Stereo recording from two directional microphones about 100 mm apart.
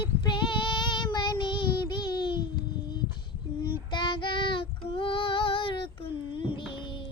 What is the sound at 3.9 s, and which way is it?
Child singing, 55° left (ahead or behind).